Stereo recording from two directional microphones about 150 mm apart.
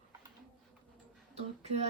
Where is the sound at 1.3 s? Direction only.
45° right (ahead or behind).